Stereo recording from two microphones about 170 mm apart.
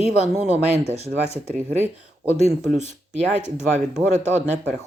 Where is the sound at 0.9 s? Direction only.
40° left (ahead or behind).